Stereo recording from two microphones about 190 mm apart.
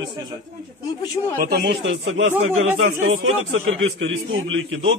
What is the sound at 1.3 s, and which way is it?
Speech, 55° right (ahead or behind).